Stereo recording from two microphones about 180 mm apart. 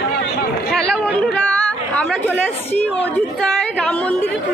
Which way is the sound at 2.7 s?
5° left (ahead or behind).